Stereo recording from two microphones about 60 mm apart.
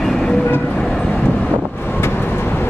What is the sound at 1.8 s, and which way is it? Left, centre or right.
Vehicle, left.